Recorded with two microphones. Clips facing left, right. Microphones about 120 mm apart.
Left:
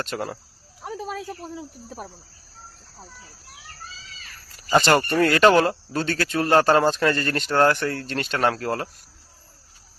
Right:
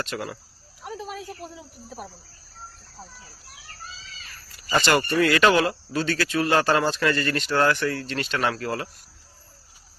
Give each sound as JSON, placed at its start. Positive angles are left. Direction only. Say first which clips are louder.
{"t": 0.0, "sound": "speech", "louder": "left 2 dB", "side_deg": 45}
{"t": 1.0, "sound": "cricket", "louder": "left 3 dB", "side_deg": 45}
{"t": 4.9, "sound": "speech", "louder": "right 1 dB", "side_deg": 45}